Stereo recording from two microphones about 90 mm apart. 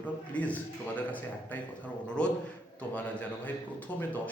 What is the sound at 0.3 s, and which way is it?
A man's voice, 15° left (ahead or behind).